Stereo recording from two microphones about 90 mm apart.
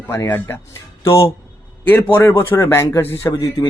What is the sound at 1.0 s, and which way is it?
Speech, 40° left (ahead or behind).